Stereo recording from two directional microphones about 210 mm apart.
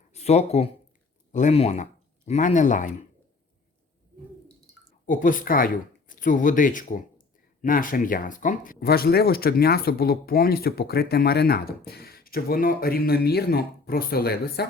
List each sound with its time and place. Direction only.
0.1 s speech: 30° left (ahead or behind)
5.0 s speech: 40° left (ahead or behind)